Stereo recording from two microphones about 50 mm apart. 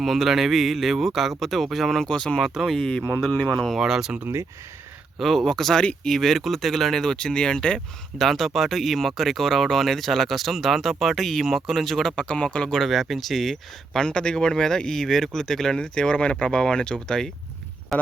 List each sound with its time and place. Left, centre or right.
0.0 s speech: centre
2.4 s speech: centre
2.7 s speech: centre
3.8 s speech: centre
5.2 s speech: centre
8.2 s speech: centre
12.1 s speech: left
12.9 s speech: centre
14.0 s speech: centre
17.9 s a sound: centre